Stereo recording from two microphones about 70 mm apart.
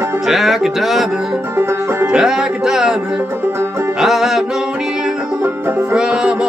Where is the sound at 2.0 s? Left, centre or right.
Centre.